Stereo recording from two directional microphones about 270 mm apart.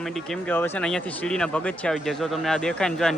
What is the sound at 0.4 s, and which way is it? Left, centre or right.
Speech, centre.